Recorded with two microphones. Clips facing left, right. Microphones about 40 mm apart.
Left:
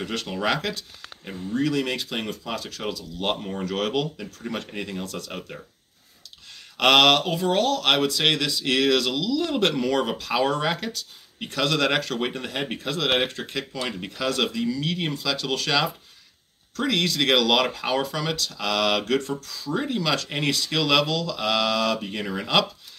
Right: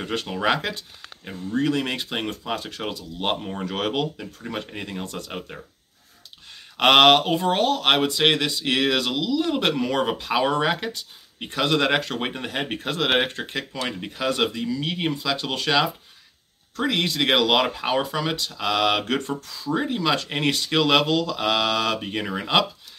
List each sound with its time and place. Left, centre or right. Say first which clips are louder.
0.0 s speech: right 2 dB; centre
3.3 s speech: even; centre
3.6 s speech: even; right
4.4 s speech: left 1 dB; centre
5.0 s speech: even; right
6.8 s speech: right 2 dB; right